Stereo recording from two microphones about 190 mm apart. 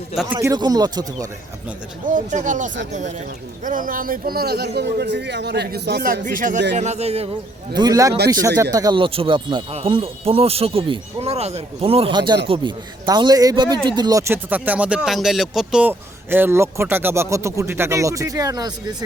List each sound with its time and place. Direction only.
0.3 s a man's voice: 20° right (ahead or behind)
2.0 s speech: 40° right (ahead or behind)
7.8 s a man's voice: 20° right (ahead or behind)